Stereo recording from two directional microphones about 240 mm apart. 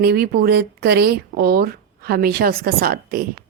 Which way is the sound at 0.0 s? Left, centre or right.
Right.